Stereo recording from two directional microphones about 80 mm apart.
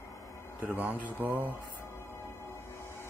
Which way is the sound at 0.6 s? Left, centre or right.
Right.